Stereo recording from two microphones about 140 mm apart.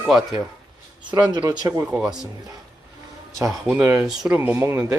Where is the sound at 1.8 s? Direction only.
5° right (ahead or behind).